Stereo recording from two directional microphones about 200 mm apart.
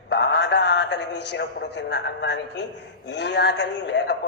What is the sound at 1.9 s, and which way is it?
A man's voice, 60° left (ahead or behind).